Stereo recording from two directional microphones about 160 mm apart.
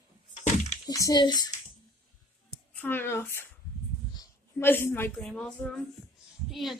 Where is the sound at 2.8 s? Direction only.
15° left (ahead or behind).